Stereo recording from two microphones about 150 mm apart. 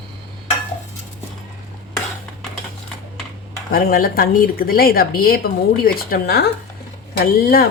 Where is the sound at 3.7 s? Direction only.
75° left (ahead or behind).